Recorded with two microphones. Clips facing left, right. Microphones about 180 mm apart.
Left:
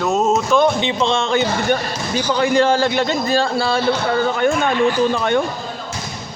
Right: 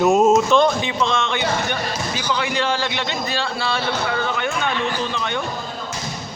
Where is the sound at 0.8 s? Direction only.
25° left (ahead or behind); by 5.4 s 45° left (ahead or behind).